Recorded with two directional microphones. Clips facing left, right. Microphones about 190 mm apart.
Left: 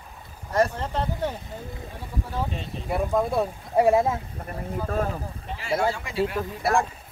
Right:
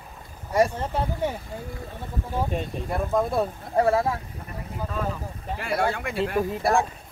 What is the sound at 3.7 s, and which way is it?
Speech, 15° left (ahead or behind).